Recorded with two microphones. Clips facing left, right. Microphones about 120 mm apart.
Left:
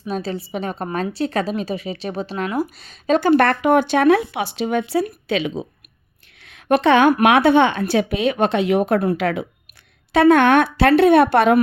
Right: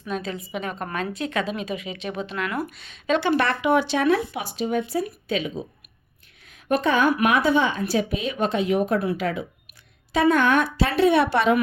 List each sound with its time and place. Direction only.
0.1 s speech: 35° left (ahead or behind); by 5.6 s 80° left
6.4 s a sound: 80° left
7.2 s a woman's voice: 70° left (ahead or behind)